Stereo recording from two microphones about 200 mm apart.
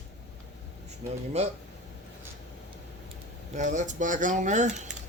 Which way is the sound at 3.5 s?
35° right (ahead or behind).